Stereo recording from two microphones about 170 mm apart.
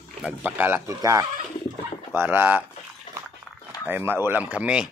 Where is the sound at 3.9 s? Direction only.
10° right (ahead or behind).